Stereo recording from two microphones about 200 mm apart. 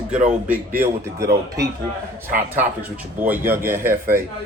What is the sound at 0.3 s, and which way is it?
Speech, 5° right (ahead or behind).